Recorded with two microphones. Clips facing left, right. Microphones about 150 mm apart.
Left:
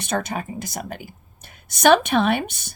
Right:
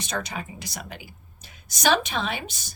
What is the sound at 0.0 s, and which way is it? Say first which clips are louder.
A woman's voice: left 6 dB; 55° left (ahead or behind).